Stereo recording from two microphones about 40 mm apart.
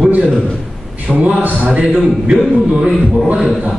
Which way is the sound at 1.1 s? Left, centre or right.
Right.